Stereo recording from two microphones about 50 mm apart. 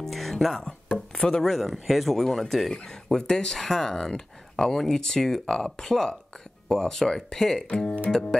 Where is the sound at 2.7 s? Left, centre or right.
Centre.